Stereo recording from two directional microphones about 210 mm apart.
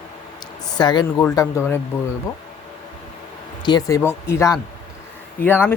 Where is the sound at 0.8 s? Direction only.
20° left (ahead or behind).